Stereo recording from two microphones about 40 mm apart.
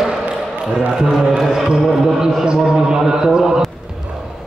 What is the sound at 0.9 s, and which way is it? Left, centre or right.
A man's voice, centre.